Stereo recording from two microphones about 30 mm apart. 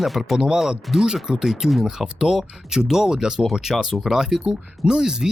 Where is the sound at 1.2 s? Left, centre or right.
Centre.